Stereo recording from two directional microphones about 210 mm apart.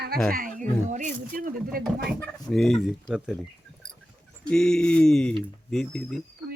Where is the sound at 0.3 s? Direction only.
40° right (ahead or behind).